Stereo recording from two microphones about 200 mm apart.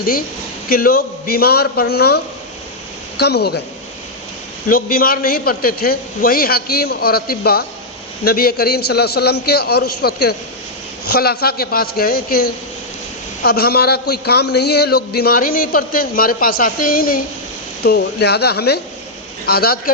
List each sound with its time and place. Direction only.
0.7 s a man's voice: 45° left (ahead or behind)
4.7 s a man's voice: 45° left (ahead or behind)